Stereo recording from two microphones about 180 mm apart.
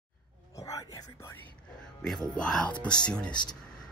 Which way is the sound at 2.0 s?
5° left (ahead or behind).